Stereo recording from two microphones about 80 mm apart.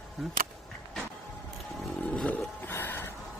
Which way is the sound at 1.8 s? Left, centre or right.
Centre.